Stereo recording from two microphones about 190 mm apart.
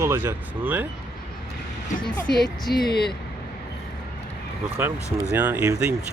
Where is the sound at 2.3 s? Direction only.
Centre (ahead or behind).